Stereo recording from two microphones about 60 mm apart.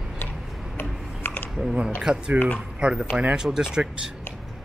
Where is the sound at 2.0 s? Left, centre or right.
Centre.